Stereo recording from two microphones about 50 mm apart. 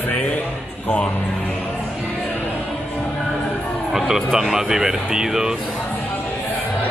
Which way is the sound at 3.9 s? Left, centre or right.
Centre.